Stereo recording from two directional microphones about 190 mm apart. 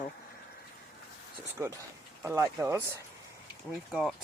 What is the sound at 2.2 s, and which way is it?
Speech, 15° right (ahead or behind).